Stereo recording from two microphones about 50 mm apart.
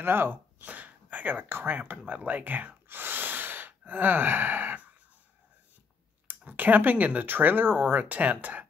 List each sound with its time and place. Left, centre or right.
0.0 s speech: right
2.9 s gasp: right
6.2 s a sound: right
7.1 s speech: right